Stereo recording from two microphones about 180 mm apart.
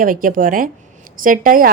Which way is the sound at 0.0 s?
50° right (ahead or behind).